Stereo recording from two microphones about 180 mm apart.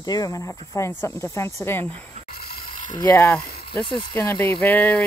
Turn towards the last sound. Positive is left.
turn(degrees=10)  # may be behind; listen again after turning